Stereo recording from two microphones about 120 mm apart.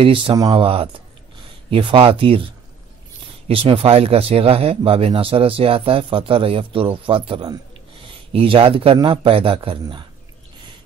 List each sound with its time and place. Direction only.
0.0 s speech: 45° right (ahead or behind)
3.4 s speech: 45° right (ahead or behind)
8.3 s speech: 50° right (ahead or behind)